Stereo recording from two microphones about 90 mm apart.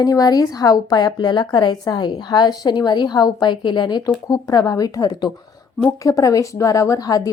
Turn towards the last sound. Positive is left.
turn(degrees=45)  # may be behind; listen again after turning